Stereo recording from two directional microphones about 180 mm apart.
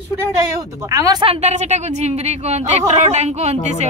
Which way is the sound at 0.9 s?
20° right (ahead or behind).